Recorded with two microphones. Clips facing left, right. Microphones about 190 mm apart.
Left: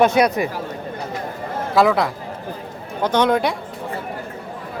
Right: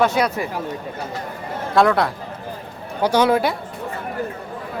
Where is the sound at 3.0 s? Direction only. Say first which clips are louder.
Right 1 dB; 10° right (ahead or behind).